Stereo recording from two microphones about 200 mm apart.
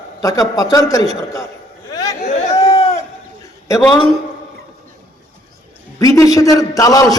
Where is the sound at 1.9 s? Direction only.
15° left (ahead or behind).